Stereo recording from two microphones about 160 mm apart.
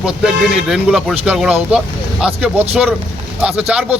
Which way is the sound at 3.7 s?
5° right (ahead or behind).